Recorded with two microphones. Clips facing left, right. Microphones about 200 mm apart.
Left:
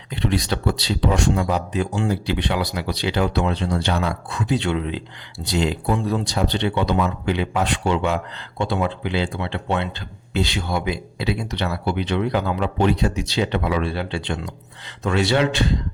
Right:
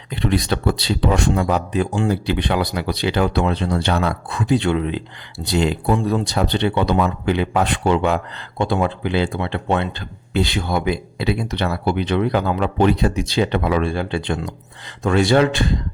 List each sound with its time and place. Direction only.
0.3 s speech: 55° right (ahead or behind)